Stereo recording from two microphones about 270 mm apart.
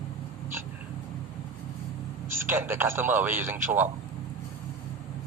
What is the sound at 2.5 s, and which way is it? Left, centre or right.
Speech, centre.